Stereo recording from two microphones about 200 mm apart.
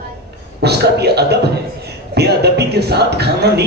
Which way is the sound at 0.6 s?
55° right (ahead or behind).